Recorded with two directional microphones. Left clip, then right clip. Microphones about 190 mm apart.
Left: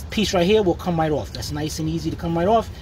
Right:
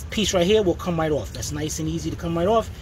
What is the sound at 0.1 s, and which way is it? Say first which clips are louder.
Speech: left 1 dB; 30° left (ahead or behind).